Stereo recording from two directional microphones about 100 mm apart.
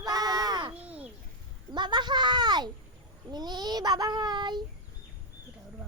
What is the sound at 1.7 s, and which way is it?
Child singing, 50° right (ahead or behind).